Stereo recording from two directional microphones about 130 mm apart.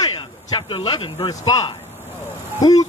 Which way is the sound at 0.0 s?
40° left (ahead or behind).